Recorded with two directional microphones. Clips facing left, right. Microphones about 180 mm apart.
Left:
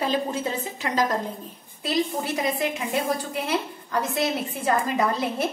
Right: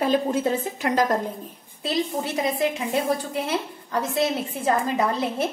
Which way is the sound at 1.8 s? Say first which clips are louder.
Even; 25° right (ahead or behind).